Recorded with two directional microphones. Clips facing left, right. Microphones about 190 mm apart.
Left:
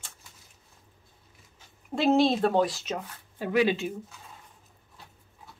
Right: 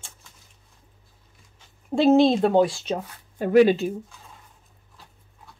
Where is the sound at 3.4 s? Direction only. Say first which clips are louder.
Right 8 dB; 45° right (ahead or behind).